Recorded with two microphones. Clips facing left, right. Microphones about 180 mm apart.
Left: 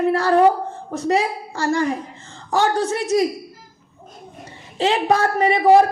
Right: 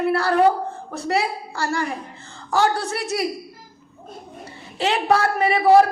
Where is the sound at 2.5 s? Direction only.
35° left (ahead or behind).